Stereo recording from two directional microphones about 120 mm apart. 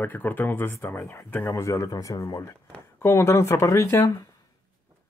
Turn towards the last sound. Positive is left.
turn(degrees=25)  # may be behind; listen again after turning